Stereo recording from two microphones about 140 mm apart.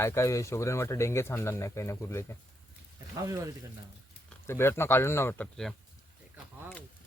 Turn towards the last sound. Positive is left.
turn(degrees=20)  # may be behind; listen again after turning